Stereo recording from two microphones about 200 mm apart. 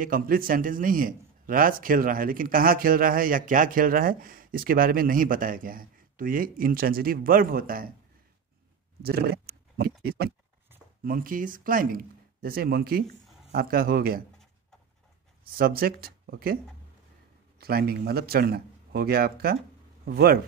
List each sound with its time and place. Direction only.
0.0 s a man's voice: 45° right (ahead or behind)
9.0 s a man's voice: 50° right (ahead or behind)
15.5 s a man's voice: 50° right (ahead or behind)
17.6 s a man's voice: 50° right (ahead or behind)